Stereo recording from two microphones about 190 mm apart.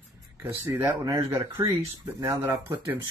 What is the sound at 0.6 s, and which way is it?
Speech, 10° right (ahead or behind).